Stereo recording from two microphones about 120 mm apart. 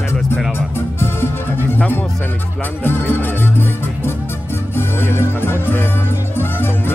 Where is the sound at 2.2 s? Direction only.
15° left (ahead or behind).